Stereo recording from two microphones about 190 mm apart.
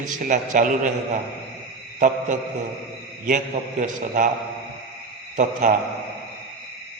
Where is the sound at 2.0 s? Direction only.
40° right (ahead or behind).